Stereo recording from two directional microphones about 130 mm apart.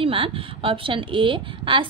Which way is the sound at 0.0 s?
45° right (ahead or behind).